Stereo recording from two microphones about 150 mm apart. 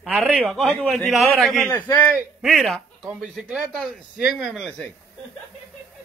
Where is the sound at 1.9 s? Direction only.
15° left (ahead or behind).